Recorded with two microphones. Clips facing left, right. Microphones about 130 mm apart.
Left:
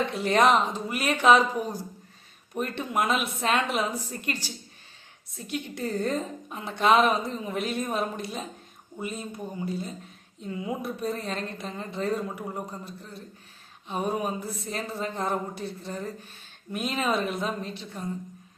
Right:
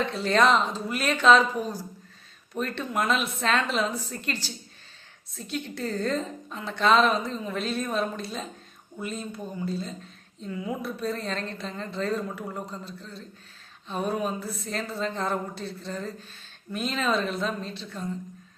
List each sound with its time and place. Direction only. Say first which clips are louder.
0.0 s a woman's voice: even; 15° left (ahead or behind)